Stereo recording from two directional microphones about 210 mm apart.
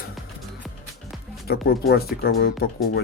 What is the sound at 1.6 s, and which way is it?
Speech, 45° left (ahead or behind).